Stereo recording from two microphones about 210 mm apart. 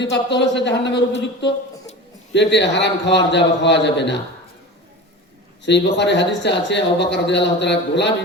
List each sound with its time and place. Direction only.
0.0 s a man's voice: 55° left (ahead or behind)
5.6 s a man's voice: 55° left (ahead or behind)